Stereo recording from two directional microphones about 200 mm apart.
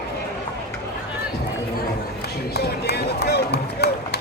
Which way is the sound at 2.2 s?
50° left (ahead or behind).